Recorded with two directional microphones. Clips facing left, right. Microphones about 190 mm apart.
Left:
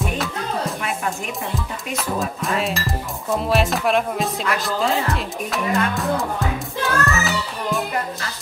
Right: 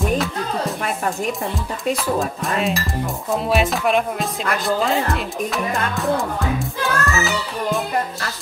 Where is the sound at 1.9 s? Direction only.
Centre (ahead or behind).